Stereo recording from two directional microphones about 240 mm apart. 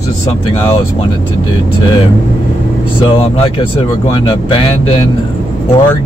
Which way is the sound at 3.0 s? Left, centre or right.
Left.